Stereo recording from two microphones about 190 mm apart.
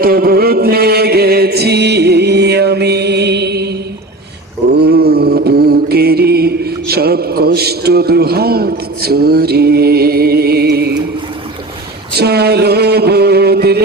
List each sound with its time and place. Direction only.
0.0 s music: 55° right (ahead or behind)
4.7 s mantra: 55° right (ahead or behind)
12.1 s a sound: 60° right (ahead or behind)